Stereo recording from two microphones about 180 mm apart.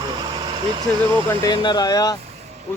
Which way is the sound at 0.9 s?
10° left (ahead or behind).